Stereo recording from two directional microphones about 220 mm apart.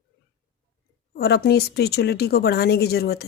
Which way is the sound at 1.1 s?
45° left (ahead or behind).